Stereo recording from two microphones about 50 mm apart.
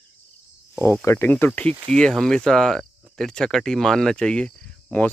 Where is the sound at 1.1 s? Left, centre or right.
Left.